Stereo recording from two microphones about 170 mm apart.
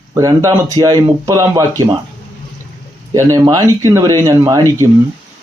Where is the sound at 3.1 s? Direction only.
15° right (ahead or behind).